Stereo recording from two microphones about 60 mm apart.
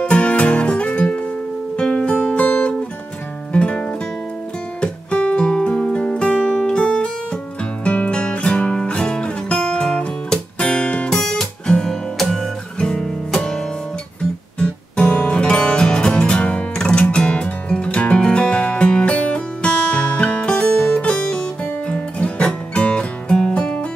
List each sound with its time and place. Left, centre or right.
0.0 s music: left
14.6 s music: centre